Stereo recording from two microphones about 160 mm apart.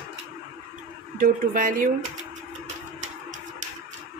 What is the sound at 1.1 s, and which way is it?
Speech, 60° right (ahead or behind).